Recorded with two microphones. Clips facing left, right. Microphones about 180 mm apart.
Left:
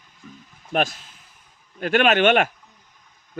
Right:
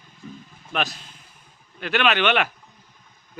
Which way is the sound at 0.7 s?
45° left (ahead or behind).